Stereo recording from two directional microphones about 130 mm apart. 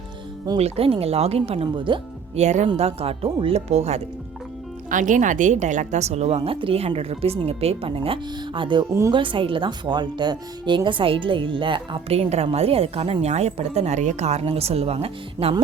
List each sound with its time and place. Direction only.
0.6 s speech: 50° right (ahead or behind)
2.3 s speech: 60° right (ahead or behind)
4.9 s speech: 80° right; by 15.5 s 50° right (ahead or behind)